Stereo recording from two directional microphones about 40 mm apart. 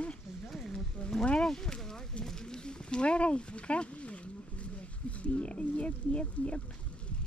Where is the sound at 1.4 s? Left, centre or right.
Centre; by 6.6 s left.